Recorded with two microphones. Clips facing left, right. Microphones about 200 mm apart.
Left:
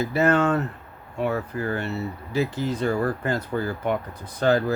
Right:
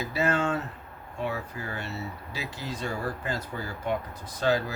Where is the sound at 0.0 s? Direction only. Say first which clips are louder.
Left 7 dB; 55° left (ahead or behind).